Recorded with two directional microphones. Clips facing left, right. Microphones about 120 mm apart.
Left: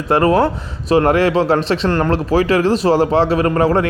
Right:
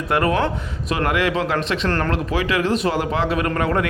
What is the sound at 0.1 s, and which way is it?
Speech, 30° left (ahead or behind).